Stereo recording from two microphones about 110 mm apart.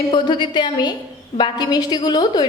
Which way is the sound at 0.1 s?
45° left (ahead or behind).